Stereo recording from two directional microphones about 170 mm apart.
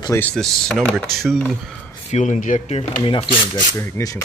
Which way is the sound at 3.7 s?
15° left (ahead or behind).